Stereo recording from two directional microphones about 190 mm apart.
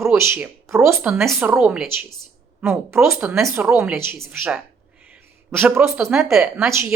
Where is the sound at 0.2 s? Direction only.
10° right (ahead or behind).